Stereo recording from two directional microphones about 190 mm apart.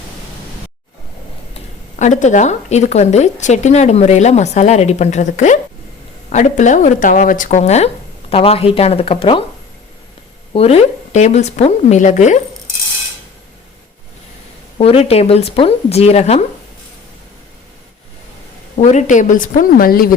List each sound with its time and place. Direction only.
2.0 s a woman's voice: 40° left (ahead or behind)
10.5 s a woman's voice: 30° left (ahead or behind)
14.8 s a woman's voice: 30° left (ahead or behind)
18.8 s a woman's voice: 40° left (ahead or behind)